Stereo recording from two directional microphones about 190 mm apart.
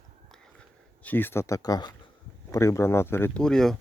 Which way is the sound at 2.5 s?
15° left (ahead or behind).